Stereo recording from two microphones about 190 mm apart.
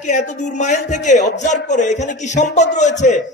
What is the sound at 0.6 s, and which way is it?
A man's voice, 40° left (ahead or behind).